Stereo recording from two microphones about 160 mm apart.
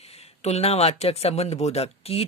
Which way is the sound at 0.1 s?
40° left (ahead or behind).